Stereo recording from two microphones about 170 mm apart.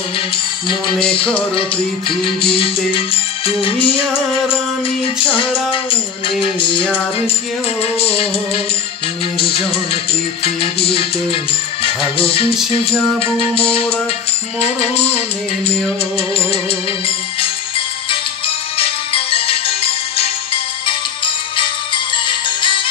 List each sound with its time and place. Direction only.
0.7 s music: 30° left (ahead or behind)
5.0 s music: 30° left (ahead or behind)
9.4 s music: 35° left (ahead or behind)
11.8 s music: 35° left (ahead or behind)
17.4 s music: 30° left (ahead or behind)